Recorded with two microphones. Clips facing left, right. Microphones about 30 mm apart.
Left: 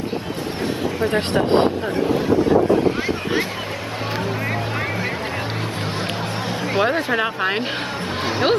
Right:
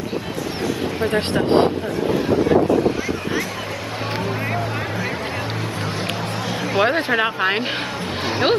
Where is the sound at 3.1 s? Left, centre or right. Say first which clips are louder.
Left 2 dB; left.